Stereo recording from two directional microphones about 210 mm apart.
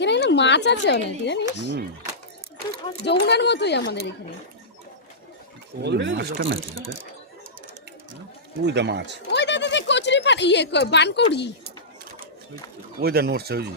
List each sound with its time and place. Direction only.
0.0 s speech: 55° left (ahead or behind)
3.0 s speech: 55° left (ahead or behind)
5.8 s speech: 55° right (ahead or behind)
8.6 s speech: 55° right (ahead or behind)
9.3 s a sound: 55° left (ahead or behind)
13.0 s speech: 50° right (ahead or behind)